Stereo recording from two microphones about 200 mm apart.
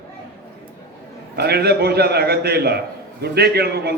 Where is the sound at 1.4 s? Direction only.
50° right (ahead or behind).